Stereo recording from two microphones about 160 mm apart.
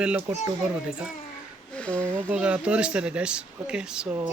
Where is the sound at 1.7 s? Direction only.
10° left (ahead or behind).